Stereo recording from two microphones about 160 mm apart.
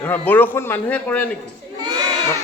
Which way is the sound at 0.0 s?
10° left (ahead or behind).